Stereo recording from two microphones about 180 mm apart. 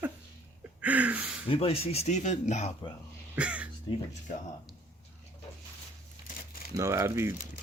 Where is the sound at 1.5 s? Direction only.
35° left (ahead or behind).